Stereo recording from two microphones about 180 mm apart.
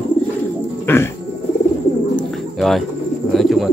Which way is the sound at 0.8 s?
15° left (ahead or behind).